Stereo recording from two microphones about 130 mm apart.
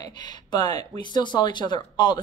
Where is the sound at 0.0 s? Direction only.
35° left (ahead or behind).